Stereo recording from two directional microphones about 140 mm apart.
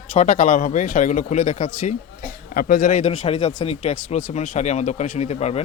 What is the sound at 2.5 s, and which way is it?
Speech, 90° left.